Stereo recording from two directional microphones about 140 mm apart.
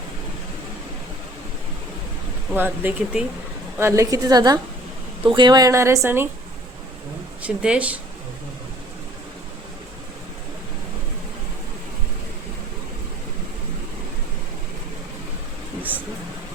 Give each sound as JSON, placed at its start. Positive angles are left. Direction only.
{"t": 2.6, "sound": "speech", "side_deg": -15}
{"t": 3.8, "sound": "a woman's voice", "side_deg": -20}
{"t": 7.4, "sound": "speech", "side_deg": -10}